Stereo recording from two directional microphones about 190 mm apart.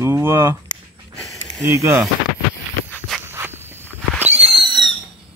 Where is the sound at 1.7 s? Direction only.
15° right (ahead or behind).